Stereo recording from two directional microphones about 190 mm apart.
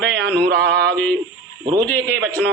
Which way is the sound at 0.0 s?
5° left (ahead or behind).